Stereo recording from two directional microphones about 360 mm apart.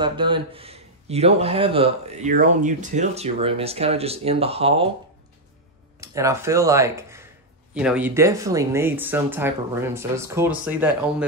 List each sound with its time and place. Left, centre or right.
0.0 s speech: centre
5.9 s speech: centre